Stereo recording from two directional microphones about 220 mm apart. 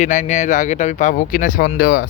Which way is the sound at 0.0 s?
35° left (ahead or behind).